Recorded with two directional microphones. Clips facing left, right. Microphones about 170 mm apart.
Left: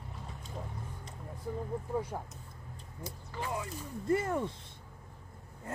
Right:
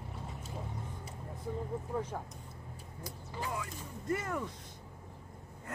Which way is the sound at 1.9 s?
10° left (ahead or behind).